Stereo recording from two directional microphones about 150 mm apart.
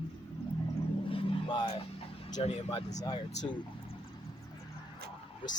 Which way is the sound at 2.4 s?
50° left (ahead or behind).